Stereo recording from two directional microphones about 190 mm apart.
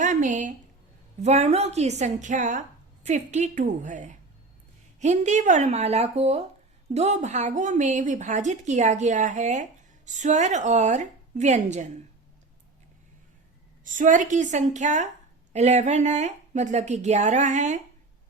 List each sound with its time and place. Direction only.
0.0 s a sound: 40° right (ahead or behind)
1.2 s speech: 35° right (ahead or behind)
13.8 s speech: 45° right (ahead or behind)